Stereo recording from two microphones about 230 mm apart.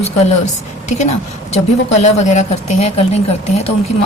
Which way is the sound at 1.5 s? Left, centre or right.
Left.